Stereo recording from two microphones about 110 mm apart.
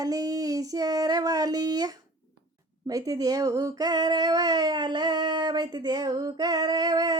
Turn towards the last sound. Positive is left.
turn(degrees=-35)  # may be behind; listen again after turning